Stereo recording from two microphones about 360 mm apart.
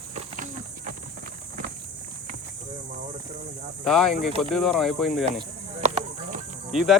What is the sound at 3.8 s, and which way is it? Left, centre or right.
Speech, centre.